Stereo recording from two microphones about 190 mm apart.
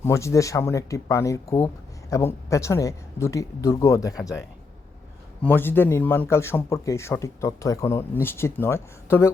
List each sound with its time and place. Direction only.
0.0 s speech: 15° left (ahead or behind)
5.4 s speech: 10° left (ahead or behind)